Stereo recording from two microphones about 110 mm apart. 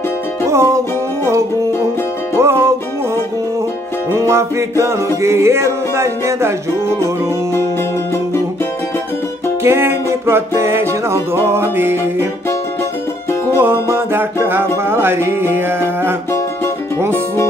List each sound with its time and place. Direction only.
0.5 s music: 25° right (ahead or behind)
4.1 s music: 25° right (ahead or behind)
9.6 s music: 20° right (ahead or behind)
13.6 s music: 20° right (ahead or behind)